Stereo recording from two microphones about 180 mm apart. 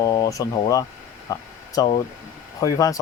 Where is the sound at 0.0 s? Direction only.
20° left (ahead or behind).